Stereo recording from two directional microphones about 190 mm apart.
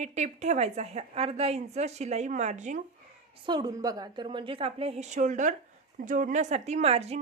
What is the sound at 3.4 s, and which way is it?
A woman's voice, 20° right (ahead or behind).